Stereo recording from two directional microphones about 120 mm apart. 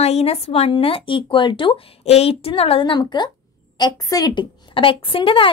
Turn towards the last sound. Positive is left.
turn(degrees=45)  # may be behind; listen again after turning